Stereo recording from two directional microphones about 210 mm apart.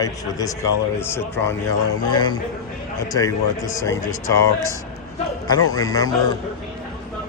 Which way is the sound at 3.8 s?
15° left (ahead or behind).